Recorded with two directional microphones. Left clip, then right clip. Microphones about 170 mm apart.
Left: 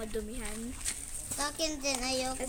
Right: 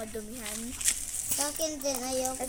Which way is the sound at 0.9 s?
60° right (ahead or behind).